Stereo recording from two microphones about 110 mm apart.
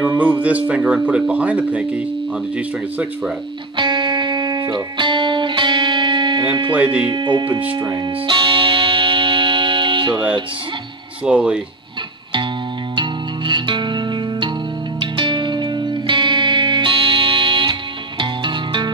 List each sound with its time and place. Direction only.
0.2 s speech: 15° right (ahead or behind)
3.7 s music: 45° right (ahead or behind)
6.7 s speech: 10° right (ahead or behind)
7.1 s speech: 45° right (ahead or behind)
7.7 s music: 40° right (ahead or behind)
11.2 s speech: 10° right (ahead or behind)
12.9 s music: 45° right (ahead or behind)